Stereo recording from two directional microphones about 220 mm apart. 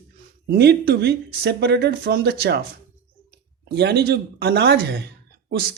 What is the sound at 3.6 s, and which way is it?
Speech, 50° right (ahead or behind).